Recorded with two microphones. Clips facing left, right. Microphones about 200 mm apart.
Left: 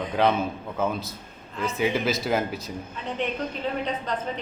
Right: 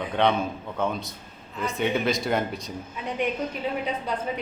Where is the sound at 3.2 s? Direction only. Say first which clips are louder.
Right 1 dB; 10° right (ahead or behind).